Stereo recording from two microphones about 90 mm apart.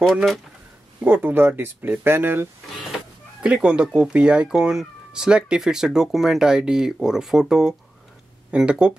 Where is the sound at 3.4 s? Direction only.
10° right (ahead or behind).